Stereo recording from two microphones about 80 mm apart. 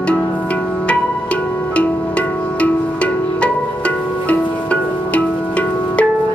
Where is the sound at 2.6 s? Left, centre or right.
Centre.